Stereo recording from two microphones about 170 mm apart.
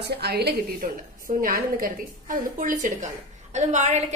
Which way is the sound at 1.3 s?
55° right (ahead or behind).